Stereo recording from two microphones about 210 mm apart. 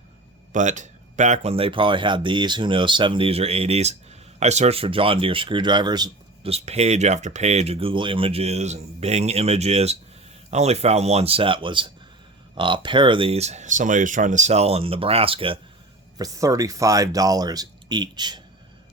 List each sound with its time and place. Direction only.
0.5 s speech: 35° right (ahead or behind); by 18.4 s 20° right (ahead or behind)